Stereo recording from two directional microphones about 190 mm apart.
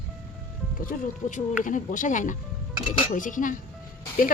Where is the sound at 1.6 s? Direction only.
45° left (ahead or behind).